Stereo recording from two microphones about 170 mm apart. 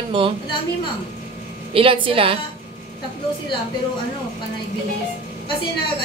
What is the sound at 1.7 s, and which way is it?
Speech, 30° right (ahead or behind).